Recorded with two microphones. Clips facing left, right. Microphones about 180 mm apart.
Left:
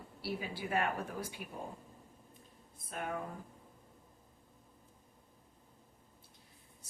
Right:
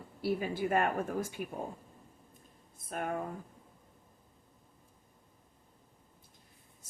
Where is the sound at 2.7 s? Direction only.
45° right (ahead or behind).